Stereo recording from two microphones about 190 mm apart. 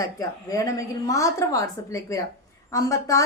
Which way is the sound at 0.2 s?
20° left (ahead or behind).